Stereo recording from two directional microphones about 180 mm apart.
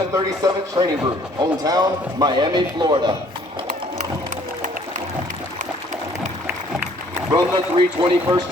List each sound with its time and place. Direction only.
0.1 s a man's voice: 20° right (ahead or behind)
7.3 s a man's voice: 30° right (ahead or behind)